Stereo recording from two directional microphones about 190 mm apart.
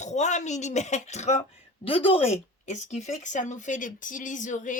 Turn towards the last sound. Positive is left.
turn(degrees=40)  # may be behind; listen again after turning